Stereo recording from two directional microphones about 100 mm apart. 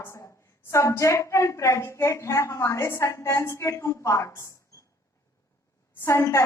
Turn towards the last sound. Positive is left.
turn(degrees=30)  # may be behind; listen again after turning